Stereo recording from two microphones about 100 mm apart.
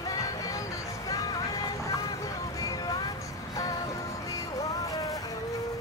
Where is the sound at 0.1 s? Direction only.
35° left (ahead or behind).